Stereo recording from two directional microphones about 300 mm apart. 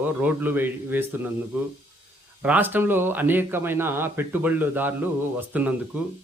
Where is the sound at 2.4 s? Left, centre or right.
Centre.